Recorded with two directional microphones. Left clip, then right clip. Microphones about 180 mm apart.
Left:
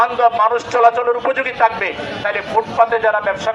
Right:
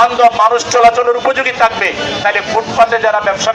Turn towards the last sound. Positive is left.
turn(degrees=15)  # may be behind; listen again after turning